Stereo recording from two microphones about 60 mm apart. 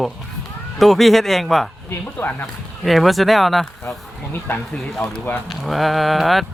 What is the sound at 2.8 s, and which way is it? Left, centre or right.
Speech, centre.